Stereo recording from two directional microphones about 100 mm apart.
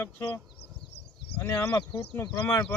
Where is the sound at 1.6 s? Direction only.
30° left (ahead or behind).